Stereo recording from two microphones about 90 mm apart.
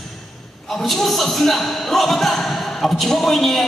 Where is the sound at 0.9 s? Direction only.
Centre (ahead or behind).